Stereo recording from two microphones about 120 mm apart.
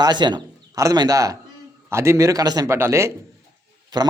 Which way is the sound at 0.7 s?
25° right (ahead or behind).